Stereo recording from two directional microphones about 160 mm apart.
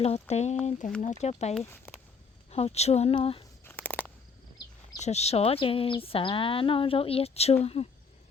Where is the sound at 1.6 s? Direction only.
15° left (ahead or behind).